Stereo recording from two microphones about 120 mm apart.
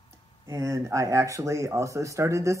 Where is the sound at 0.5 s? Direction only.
25° right (ahead or behind).